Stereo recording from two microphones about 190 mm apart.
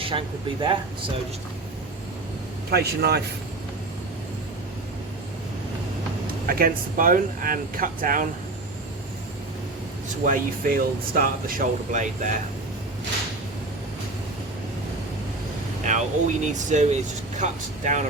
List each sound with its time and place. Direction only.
0.0 s speech: 25° right (ahead or behind)
2.6 s speech: 55° right (ahead or behind)
6.4 s speech: 50° right (ahead or behind)
10.2 s speech: 45° right (ahead or behind)
15.9 s speech: 40° right (ahead or behind)